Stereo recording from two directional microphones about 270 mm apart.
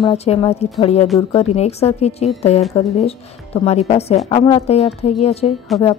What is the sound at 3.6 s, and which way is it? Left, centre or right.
Speech, left.